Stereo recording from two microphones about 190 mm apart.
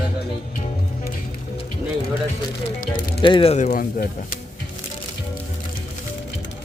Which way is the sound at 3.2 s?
25° left (ahead or behind).